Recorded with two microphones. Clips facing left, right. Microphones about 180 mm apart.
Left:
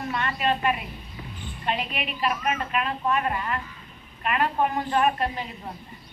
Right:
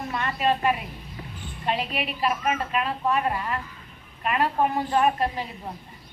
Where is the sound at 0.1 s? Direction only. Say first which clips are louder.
Right 2 dB; 35° right (ahead or behind).